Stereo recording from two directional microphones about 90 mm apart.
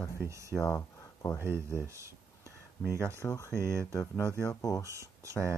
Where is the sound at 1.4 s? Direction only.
30° right (ahead or behind).